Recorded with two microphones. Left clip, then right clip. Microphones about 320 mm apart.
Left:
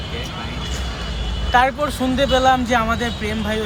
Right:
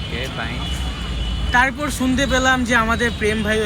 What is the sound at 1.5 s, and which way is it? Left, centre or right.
Speech, centre.